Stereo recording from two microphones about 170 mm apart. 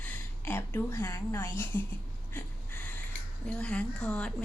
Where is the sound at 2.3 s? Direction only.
10° left (ahead or behind).